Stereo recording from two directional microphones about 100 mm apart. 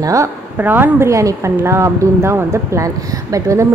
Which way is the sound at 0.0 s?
35° right (ahead or behind).